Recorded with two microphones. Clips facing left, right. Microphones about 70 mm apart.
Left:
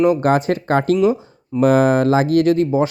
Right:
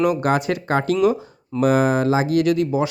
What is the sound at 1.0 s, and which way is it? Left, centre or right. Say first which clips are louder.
Speech: left 2 dB; left.